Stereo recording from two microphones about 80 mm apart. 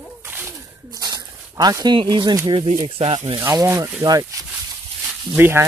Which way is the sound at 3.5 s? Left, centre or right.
Right.